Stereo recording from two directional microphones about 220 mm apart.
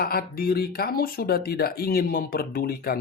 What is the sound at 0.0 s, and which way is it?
Speech, 45° left (ahead or behind).